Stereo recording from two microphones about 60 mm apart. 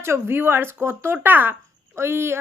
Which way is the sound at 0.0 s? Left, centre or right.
Right.